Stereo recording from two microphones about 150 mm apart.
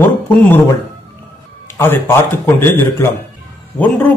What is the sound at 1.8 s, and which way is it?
A man's voice, 15° left (ahead or behind).